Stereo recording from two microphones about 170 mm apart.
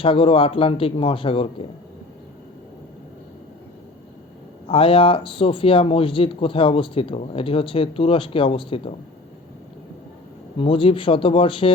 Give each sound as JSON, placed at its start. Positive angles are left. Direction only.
{"t": 0.0, "sound": "speech", "side_deg": 30}
{"t": 4.7, "sound": "speech", "side_deg": 35}
{"t": 10.6, "sound": "speech", "side_deg": 30}